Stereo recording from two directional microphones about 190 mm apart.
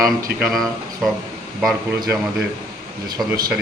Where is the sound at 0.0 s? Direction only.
50° right (ahead or behind).